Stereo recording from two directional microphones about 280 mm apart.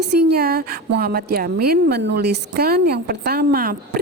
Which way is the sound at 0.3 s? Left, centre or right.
Right.